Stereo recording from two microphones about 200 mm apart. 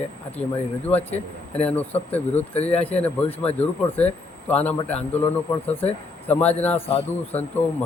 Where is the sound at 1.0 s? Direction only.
30° left (ahead or behind).